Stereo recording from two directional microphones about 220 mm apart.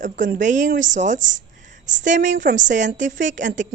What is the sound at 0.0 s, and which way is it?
A woman's voice, 35° right (ahead or behind).